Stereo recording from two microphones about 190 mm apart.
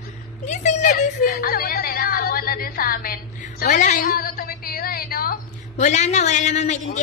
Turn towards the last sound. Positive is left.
turn(degrees=40)  # may be behind; listen again after turning